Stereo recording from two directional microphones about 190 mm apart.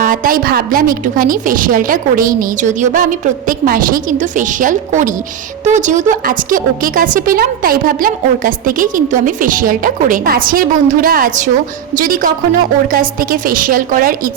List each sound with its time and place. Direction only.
0.0 s a woman's voice: 45° right (ahead or behind)